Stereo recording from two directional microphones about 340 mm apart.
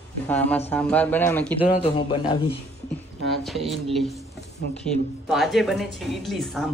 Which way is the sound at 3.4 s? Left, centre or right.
Centre.